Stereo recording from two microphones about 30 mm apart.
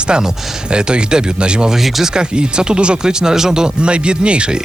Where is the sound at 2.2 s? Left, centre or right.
Right.